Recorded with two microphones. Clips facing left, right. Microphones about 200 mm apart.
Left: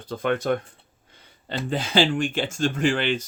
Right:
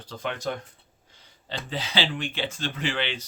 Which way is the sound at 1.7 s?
50° left (ahead or behind).